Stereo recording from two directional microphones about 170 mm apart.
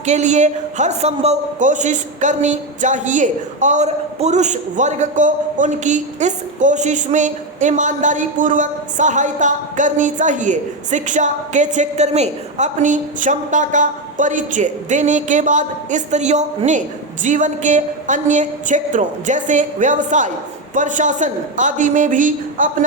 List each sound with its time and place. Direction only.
0.0 s a woman's voice: 45° right (ahead or behind)